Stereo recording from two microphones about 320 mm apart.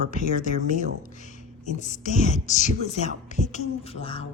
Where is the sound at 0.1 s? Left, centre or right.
Left.